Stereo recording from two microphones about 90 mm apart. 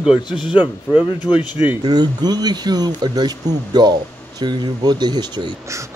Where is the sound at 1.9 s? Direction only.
50° right (ahead or behind).